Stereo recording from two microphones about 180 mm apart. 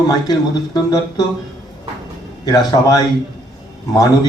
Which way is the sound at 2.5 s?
20° left (ahead or behind).